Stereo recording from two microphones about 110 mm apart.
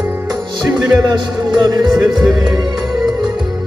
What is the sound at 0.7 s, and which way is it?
Music, 40° right (ahead or behind).